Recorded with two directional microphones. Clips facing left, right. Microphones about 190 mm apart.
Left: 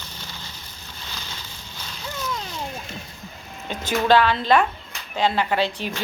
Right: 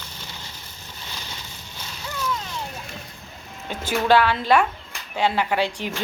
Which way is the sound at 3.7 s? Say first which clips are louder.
Even; 10° right (ahead or behind).